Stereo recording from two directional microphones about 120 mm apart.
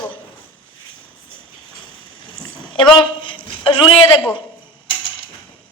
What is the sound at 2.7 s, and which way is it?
A woman's voice, 40° left (ahead or behind).